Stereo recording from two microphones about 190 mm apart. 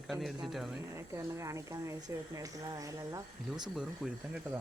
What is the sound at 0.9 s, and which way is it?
A woman's voice, 15° right (ahead or behind).